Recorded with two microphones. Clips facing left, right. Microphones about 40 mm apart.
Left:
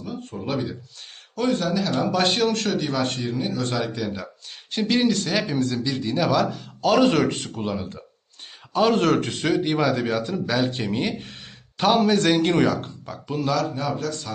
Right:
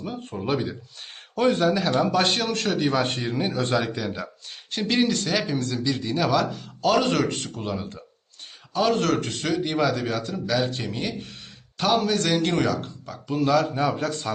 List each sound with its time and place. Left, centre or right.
0.0 s speech: right
0.3 s speech: centre
2.1 s speech: centre
2.8 s speech: centre
3.7 s speech: centre
8.7 s a man's voice: centre
10.7 s a man's voice: centre
13.4 s speech: centre
13.7 s speech: centre